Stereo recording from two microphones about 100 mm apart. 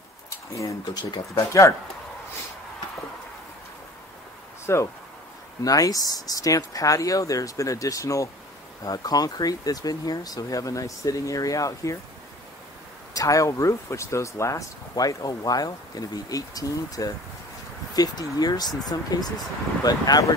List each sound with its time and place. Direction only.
0.6 s speech: 30° left (ahead or behind)
4.7 s speech: 25° left (ahead or behind)
5.6 s speech: 35° left (ahead or behind)
13.1 s speech: 35° left (ahead or behind)